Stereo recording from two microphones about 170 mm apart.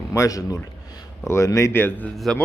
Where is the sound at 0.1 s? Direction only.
20° left (ahead or behind).